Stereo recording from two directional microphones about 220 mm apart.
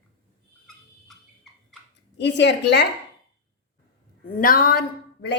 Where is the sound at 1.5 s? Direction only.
Centre (ahead or behind).